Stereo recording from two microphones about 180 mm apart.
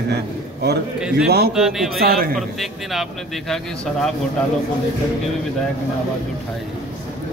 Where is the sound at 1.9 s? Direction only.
55° right (ahead or behind).